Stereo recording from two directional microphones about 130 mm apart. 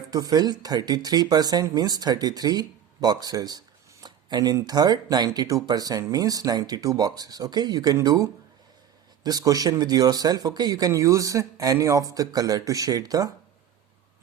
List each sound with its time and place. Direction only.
0.1 s speech: 30° right (ahead or behind)